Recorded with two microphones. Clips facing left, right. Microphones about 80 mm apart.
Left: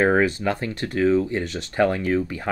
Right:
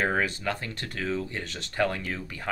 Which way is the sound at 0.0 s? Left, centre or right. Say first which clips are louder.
Left 8 dB; left.